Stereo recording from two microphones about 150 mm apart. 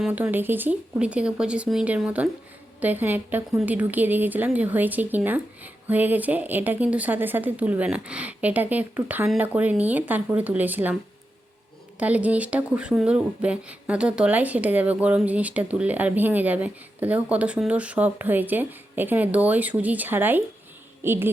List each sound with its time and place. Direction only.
0.0 s speech: 10° right (ahead or behind)
11.9 s speech: 10° right (ahead or behind)